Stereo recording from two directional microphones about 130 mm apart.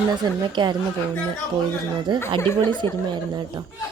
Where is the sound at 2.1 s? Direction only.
35° right (ahead or behind).